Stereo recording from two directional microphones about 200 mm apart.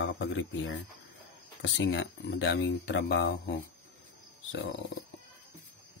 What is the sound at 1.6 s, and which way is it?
Speech, 60° left (ahead or behind).